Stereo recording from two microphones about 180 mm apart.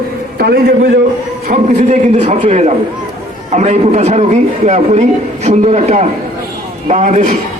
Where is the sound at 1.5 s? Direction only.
40° right (ahead or behind).